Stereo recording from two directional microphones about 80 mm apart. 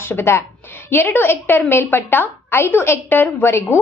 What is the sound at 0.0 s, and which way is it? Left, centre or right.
A woman's voice, left.